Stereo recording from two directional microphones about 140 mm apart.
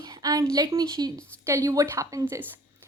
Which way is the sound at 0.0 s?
25° right (ahead or behind).